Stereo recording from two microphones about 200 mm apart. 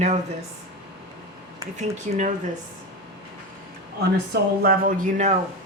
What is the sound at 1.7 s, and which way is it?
Speech, 40° right (ahead or behind).